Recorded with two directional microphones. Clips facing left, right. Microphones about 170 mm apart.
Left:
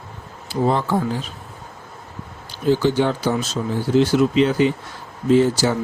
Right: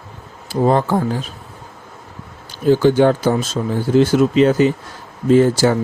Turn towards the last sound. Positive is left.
turn(degrees=-50)  # may be behind; listen again after turning